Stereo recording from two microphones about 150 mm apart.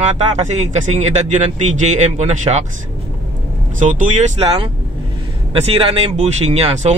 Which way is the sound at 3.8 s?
55° right (ahead or behind).